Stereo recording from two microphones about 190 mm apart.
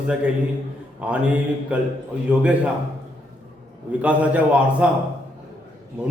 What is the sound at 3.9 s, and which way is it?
A man's voice, 5° right (ahead or behind).